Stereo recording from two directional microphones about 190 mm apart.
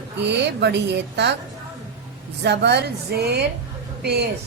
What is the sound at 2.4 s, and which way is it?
A woman's voice, 65° right (ahead or behind).